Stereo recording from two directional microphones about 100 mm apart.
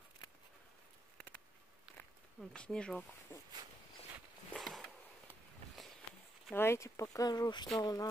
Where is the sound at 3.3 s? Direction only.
20° left (ahead or behind).